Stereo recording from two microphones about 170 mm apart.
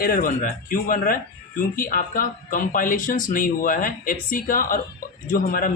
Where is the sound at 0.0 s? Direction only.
55° left (ahead or behind).